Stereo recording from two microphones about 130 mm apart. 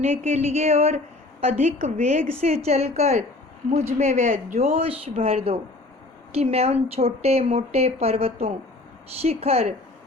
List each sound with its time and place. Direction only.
0.0 s a woman's voice: 55° right (ahead or behind); by 4.5 s 80° right
4.5 s a woman's voice: 50° right (ahead or behind)